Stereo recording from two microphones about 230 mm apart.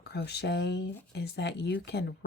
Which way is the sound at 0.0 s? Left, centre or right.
Left.